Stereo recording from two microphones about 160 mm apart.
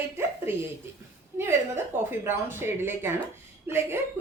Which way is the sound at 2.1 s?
15° right (ahead or behind).